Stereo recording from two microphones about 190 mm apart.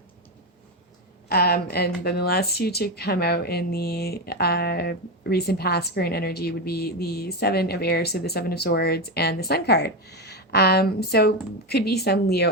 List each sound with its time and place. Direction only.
1.3 s speech: 55° left (ahead or behind)